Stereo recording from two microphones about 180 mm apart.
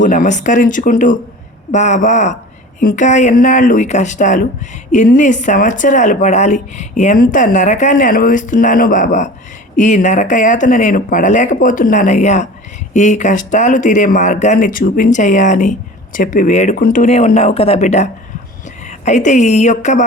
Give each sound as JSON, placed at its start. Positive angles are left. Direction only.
{"t": 0.0, "sound": "speech", "side_deg": 45}